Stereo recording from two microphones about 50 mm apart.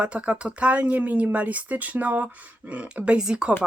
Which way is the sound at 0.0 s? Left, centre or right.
Right.